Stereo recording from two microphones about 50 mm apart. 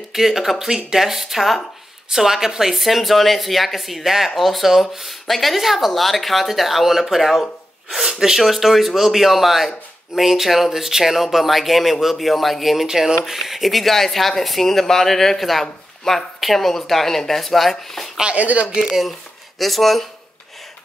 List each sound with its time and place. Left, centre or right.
0.1 s speech: centre
18.2 s speech: right
19.6 s speech: centre